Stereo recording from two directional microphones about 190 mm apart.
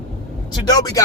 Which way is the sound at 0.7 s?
20° left (ahead or behind).